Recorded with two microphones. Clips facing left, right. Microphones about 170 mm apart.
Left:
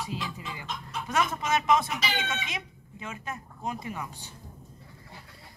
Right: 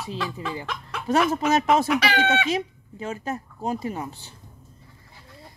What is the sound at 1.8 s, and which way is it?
Chicken, 75° right (ahead or behind).